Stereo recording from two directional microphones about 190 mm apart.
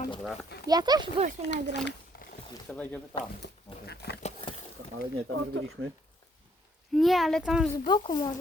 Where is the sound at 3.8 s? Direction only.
60° left (ahead or behind).